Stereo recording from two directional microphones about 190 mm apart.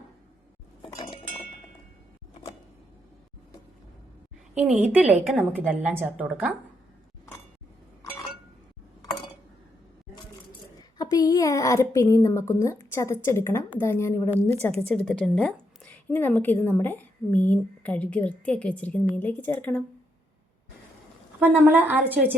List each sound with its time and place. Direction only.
0.9 s cutlery: 15° left (ahead or behind)
4.5 s a woman's voice: 5° right (ahead or behind)
10.9 s a woman's voice: 20° left (ahead or behind)
21.3 s a woman's voice: 10° right (ahead or behind)